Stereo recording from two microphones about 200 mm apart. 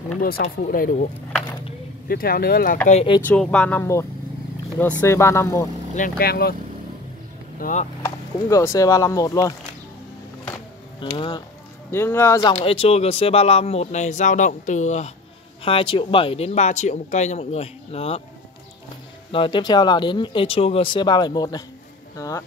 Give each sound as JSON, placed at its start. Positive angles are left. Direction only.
{"t": 0.2, "sound": "speech", "side_deg": 45}
{"t": 2.0, "sound": "speech", "side_deg": 50}
{"t": 2.9, "sound": "speech", "side_deg": 30}
{"t": 3.3, "sound": "speech", "side_deg": 5}
{"t": 5.9, "sound": "speech", "side_deg": 45}
{"t": 7.5, "sound": "speech", "side_deg": 40}
{"t": 8.0, "sound": "speech", "side_deg": 15}
{"t": 11.0, "sound": "speech", "side_deg": 25}
{"t": 11.9, "sound": "speech", "side_deg": 10}
{"t": 19.3, "sound": "speech", "side_deg": 25}